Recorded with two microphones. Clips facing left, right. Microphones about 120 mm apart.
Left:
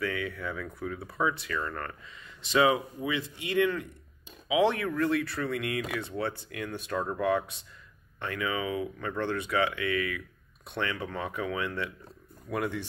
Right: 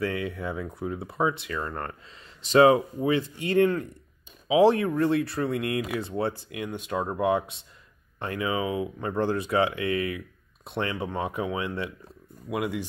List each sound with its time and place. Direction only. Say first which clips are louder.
0.0 s speech: right 3 dB; 30° right (ahead or behind)
2.5 s speech: right 7 dB; 40° right (ahead or behind); by 12.8 s 15° right (ahead or behind)